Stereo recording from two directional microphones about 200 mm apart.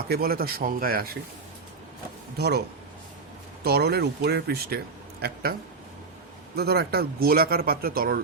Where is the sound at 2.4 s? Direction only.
55° right (ahead or behind).